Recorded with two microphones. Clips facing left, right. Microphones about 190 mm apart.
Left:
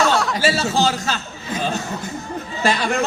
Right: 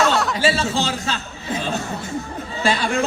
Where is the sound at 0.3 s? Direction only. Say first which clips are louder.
Left 1 dB; 40° left (ahead or behind).